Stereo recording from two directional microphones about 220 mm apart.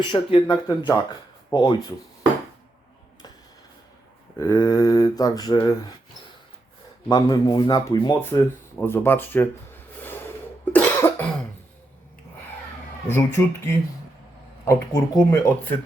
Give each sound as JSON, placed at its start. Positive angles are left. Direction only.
{"t": 0.0, "sound": "speech", "side_deg": 25}
{"t": 4.4, "sound": "mantra", "side_deg": 15}
{"t": 7.1, "sound": "a sound", "side_deg": 20}
{"t": 13.1, "sound": "mantra", "side_deg": 10}
{"t": 14.6, "sound": "mantra", "side_deg": 15}